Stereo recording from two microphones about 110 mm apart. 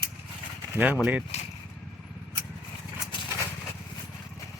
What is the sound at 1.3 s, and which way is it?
Speech, 80° left.